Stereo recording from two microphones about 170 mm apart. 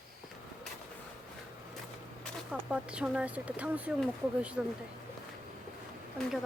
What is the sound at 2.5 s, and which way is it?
Speech, 5° right (ahead or behind).